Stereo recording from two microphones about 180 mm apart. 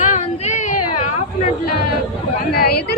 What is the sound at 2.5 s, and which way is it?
Speech, 60° left (ahead or behind).